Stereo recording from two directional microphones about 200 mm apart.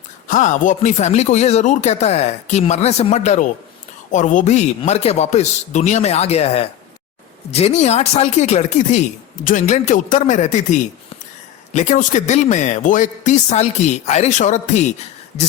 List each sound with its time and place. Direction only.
0.3 s speech: 40° left (ahead or behind)